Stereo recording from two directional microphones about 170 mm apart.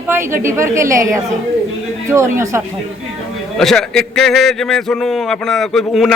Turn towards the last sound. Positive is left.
turn(degrees=0)  # may be behind; listen again after turning